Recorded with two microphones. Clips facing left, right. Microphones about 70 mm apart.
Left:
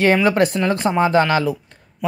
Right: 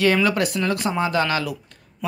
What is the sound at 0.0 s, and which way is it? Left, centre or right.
Speech, left.